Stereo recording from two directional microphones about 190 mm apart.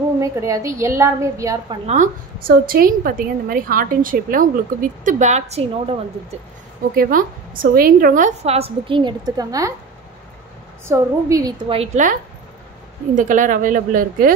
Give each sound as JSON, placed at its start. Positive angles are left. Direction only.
{"t": 0.2, "sound": "a woman's voice", "side_deg": -15}
{"t": 1.9, "sound": "a woman's voice", "side_deg": -45}
{"t": 7.0, "sound": "a woman's voice", "side_deg": -45}
{"t": 10.9, "sound": "a woman's voice", "side_deg": -15}
{"t": 11.7, "sound": "a woman's voice", "side_deg": -35}